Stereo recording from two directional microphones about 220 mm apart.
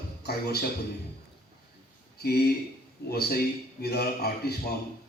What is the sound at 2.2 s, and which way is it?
Speech, 45° left (ahead or behind).